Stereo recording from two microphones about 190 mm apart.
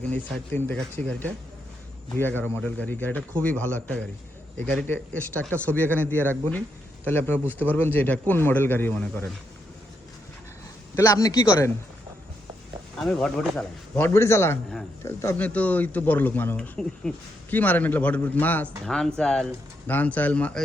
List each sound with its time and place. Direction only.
0.1 s speech: 10° left (ahead or behind)
10.9 s speech: 15° left (ahead or behind)
13.0 s speech: 5° left (ahead or behind)
13.9 s speech: 15° left (ahead or behind)